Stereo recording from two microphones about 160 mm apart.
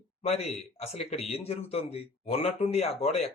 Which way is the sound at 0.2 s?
40° left (ahead or behind).